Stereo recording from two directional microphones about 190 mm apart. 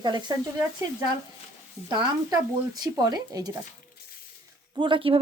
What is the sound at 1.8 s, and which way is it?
Speech, 25° right (ahead or behind).